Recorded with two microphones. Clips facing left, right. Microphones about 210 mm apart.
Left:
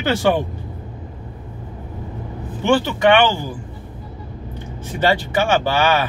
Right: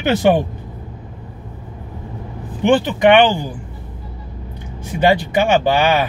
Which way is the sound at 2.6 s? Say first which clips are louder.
Right 3 dB; 15° right (ahead or behind).